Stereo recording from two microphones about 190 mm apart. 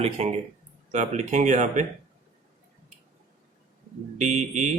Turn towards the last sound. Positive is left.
turn(degrees=-40)  # may be behind; listen again after turning